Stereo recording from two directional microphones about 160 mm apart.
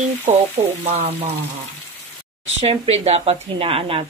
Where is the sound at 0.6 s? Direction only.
35° right (ahead or behind).